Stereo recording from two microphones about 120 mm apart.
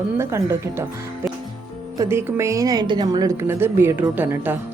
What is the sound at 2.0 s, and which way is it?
A woman's voice, 20° right (ahead or behind).